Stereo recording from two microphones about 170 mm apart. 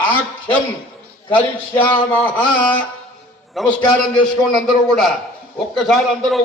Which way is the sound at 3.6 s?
Centre (ahead or behind).